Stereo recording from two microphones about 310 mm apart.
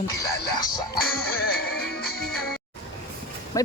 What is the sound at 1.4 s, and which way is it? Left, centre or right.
Music, left.